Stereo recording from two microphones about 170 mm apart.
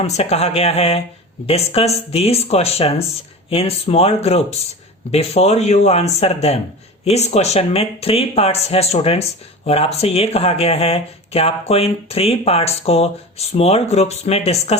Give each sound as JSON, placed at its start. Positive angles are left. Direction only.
{"t": 0.2, "sound": "speech", "side_deg": 35}